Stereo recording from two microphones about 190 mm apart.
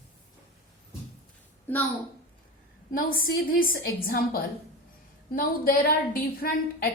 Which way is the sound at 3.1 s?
50° left (ahead or behind).